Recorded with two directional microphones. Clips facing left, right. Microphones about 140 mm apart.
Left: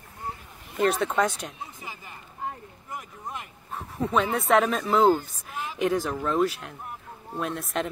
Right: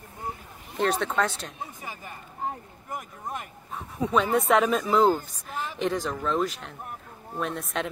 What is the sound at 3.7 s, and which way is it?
Dog, centre (ahead or behind).